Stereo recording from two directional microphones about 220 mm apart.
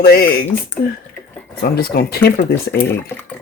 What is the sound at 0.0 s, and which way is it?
Speech, 45° left (ahead or behind).